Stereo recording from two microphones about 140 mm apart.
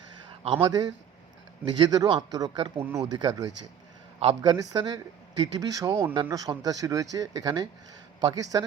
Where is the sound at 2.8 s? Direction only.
15° right (ahead or behind).